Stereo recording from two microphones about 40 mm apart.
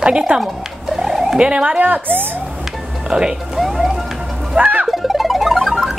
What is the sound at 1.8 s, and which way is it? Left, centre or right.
Speech, right.